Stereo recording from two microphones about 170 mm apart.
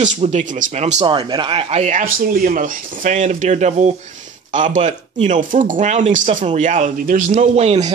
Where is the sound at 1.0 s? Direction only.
25° right (ahead or behind).